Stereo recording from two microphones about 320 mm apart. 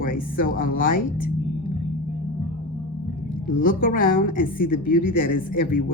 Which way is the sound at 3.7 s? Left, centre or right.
Left.